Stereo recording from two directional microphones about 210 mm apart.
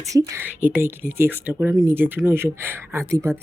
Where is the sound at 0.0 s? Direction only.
15° right (ahead or behind).